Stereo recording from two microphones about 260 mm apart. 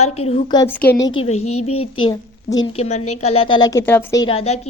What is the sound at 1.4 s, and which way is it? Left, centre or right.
Speech, left.